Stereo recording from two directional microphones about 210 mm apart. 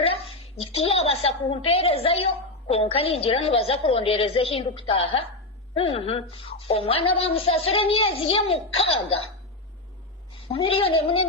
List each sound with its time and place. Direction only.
0.0 s a woman's voice: 25° left (ahead or behind)
10.5 s a woman's voice: 25° left (ahead or behind)